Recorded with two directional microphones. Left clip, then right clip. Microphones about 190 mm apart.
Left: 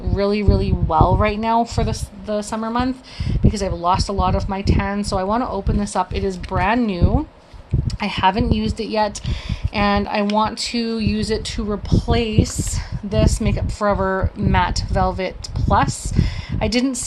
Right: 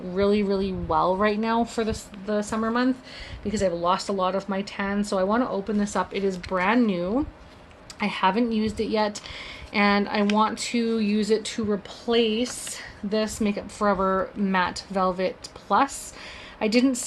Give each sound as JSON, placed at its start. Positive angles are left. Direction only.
{"t": 0.2, "sound": "speech", "side_deg": 40}